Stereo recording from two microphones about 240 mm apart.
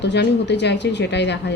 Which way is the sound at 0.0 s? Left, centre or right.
Left.